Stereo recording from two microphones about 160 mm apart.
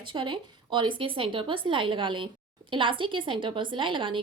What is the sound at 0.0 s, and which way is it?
Speech, 30° right (ahead or behind).